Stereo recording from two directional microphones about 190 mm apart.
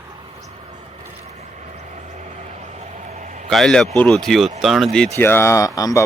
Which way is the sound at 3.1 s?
40° right (ahead or behind).